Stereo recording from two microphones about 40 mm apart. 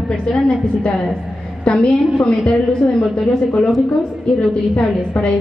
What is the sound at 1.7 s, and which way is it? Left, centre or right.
Speech, left.